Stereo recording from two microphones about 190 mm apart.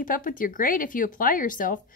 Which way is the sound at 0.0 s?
45° left (ahead or behind).